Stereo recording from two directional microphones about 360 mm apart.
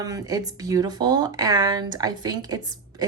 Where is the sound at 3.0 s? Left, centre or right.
Centre.